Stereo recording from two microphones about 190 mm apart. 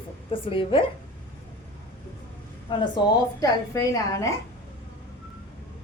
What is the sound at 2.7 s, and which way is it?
A woman's voice, 25° left (ahead or behind).